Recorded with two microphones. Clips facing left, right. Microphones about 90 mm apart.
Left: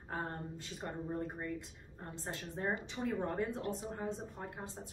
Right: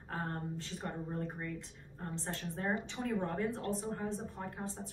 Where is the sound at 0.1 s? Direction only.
20° left (ahead or behind).